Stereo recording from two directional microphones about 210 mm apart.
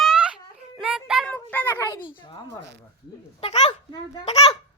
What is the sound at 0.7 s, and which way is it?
A child's voice, 5° right (ahead or behind).